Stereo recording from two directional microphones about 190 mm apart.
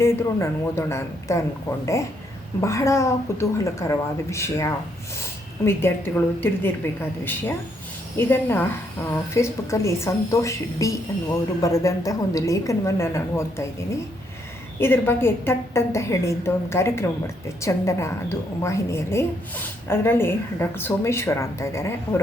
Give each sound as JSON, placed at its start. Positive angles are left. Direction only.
{"t": 0.0, "sound": "a woman's voice", "side_deg": 15}
{"t": 14.8, "sound": "a woman's voice", "side_deg": 10}